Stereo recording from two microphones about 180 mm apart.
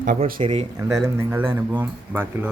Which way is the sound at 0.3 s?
30° right (ahead or behind).